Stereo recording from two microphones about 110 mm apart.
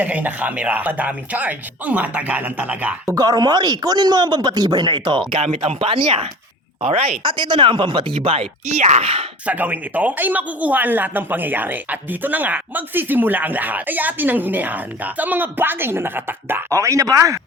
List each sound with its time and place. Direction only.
0.0 s speech: 15° right (ahead or behind)
3.2 s speech: 35° right (ahead or behind)
5.4 s speech: 80° right
5.8 s speech: 50° right (ahead or behind); by 9.2 s 70° right (ahead or behind)
9.5 s speech: 15° right (ahead or behind)